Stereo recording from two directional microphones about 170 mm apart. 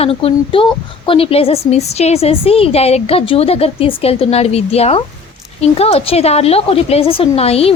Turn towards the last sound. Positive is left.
turn(degrees=35)  # may be behind; listen again after turning